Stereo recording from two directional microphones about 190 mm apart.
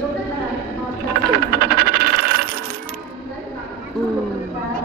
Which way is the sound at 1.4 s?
55° right (ahead or behind).